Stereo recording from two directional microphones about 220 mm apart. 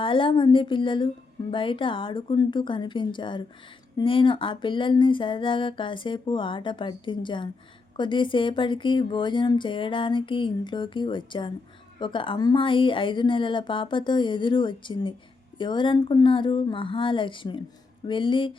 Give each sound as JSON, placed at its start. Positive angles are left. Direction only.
{"t": 0.0, "sound": "speech", "side_deg": 25}